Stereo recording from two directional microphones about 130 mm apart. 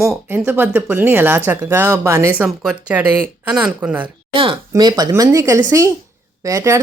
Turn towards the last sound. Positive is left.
turn(degrees=-25)  # may be behind; listen again after turning